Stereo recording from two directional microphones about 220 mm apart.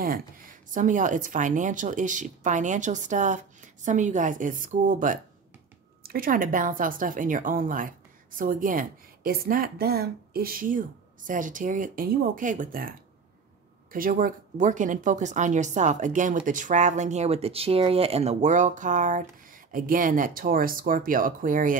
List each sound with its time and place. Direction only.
0.7 s speech: 35° right (ahead or behind)
13.9 s speech: 40° right (ahead or behind)